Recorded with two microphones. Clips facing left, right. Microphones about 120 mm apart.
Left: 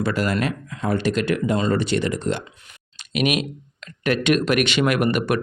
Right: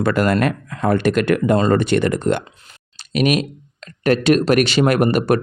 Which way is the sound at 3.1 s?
40° right (ahead or behind).